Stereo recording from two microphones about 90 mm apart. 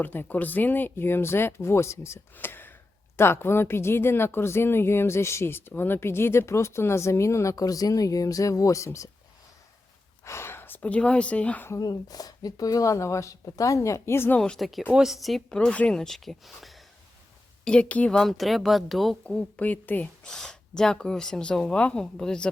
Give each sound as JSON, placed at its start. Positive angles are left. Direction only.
{"t": 0.0, "sound": "speech", "side_deg": 20}
{"t": 10.2, "sound": "speech", "side_deg": 30}
{"t": 11.8, "sound": "speech", "side_deg": 45}
{"t": 14.3, "sound": "speech", "side_deg": 5}
{"t": 15.5, "sound": "speech", "side_deg": 15}
{"t": 17.7, "sound": "speech", "side_deg": 15}
{"t": 18.2, "sound": "speech", "side_deg": 0}
{"t": 19.2, "sound": "speech", "side_deg": 15}
{"t": 20.2, "sound": "speech", "side_deg": 5}